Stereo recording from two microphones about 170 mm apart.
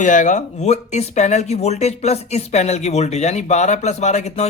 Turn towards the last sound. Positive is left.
turn(degrees=40)  # may be behind; listen again after turning